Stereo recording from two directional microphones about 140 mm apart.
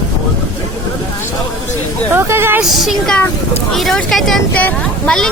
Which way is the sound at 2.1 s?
15° right (ahead or behind).